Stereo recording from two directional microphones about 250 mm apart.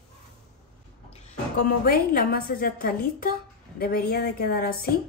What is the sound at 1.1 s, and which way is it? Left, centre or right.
A woman's voice, left.